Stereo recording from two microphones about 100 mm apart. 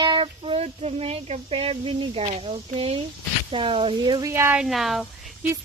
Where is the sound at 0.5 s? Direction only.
90° right; by 3.0 s 75° right (ahead or behind).